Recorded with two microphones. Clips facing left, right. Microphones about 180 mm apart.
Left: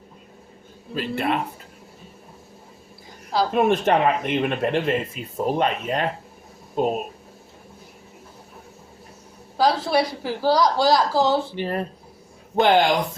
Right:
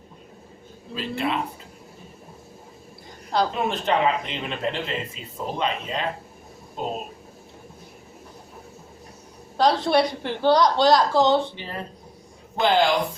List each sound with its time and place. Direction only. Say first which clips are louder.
0.9 s speech: left 2 dB; 55° left (ahead or behind)
3.5 s speech: left 5 dB; 55° left (ahead or behind)
9.6 s a woman's voice: right 1 dB; 5° left (ahead or behind)
11.5 s speech: left 8 dB; 55° left (ahead or behind)